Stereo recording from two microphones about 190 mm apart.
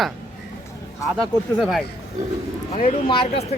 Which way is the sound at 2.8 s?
30° left (ahead or behind).